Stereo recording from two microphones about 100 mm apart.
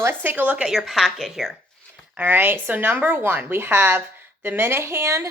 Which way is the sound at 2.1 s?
20° right (ahead or behind).